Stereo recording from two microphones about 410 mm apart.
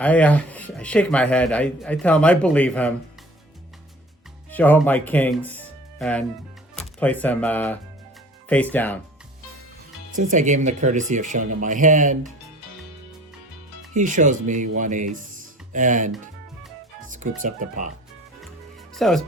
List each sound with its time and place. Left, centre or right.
0.0 s speech: centre
4.5 s speech: centre
10.1 s speech: centre
13.9 s speech: centre
18.9 s speech: centre